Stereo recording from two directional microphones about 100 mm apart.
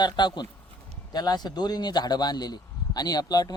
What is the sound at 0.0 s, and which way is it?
A man's voice, 50° left (ahead or behind).